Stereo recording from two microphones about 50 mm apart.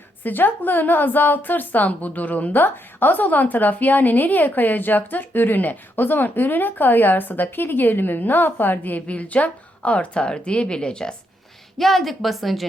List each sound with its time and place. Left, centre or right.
0.2 s a woman's voice: left; by 11.1 s centre
11.8 s a woman's voice: centre